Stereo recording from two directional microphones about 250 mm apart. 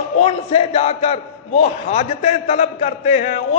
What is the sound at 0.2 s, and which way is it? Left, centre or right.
A man's voice, left.